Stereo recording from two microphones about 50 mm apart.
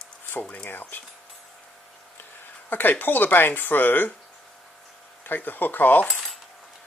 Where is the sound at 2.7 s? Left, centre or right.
Left.